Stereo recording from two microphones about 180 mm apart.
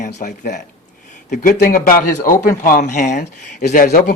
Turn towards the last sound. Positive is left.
turn(degrees=45)  # may be behind; listen again after turning